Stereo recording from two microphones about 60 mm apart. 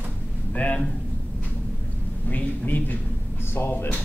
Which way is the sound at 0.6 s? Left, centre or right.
Left.